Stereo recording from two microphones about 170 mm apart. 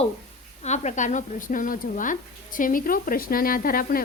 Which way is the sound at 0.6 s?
40° left (ahead or behind).